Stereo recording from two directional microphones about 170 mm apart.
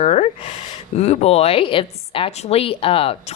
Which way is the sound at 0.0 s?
40° left (ahead or behind).